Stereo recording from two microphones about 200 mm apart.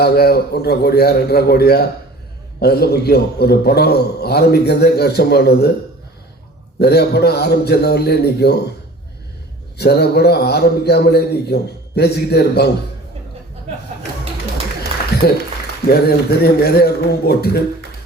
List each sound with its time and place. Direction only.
0.0 s a man's voice: 50° left (ahead or behind)
6.7 s a man's voice: 55° left (ahead or behind)
9.7 s a man's voice: 55° left (ahead or behind)
15.2 s a man's voice: 50° left (ahead or behind)